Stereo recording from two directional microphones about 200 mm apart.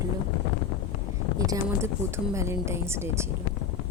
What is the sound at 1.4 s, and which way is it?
Speech, 15° right (ahead or behind).